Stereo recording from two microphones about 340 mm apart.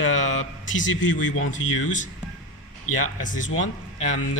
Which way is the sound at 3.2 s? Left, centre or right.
Left.